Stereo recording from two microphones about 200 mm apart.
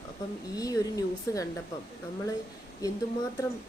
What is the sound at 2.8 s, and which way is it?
Speech, 15° left (ahead or behind).